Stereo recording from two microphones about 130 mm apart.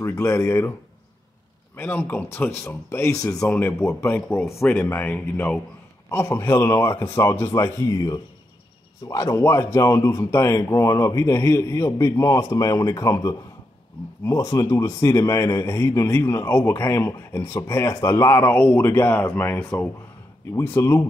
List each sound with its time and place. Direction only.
0.0 s a man's voice: 20° left (ahead or behind)
1.8 s a man's voice: 15° left (ahead or behind)